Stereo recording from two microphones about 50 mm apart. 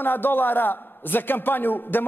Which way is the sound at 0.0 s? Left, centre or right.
Left.